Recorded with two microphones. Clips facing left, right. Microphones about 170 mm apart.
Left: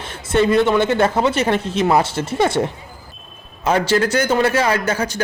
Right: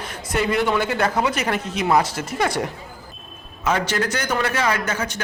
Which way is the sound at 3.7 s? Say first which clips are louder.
Left 5 dB; 30° left (ahead or behind).